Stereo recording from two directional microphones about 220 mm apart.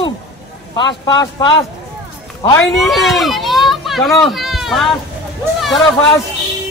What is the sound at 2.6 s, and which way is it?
Speech, centre (ahead or behind).